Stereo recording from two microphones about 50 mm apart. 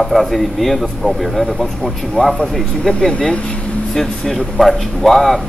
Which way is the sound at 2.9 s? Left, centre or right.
Left.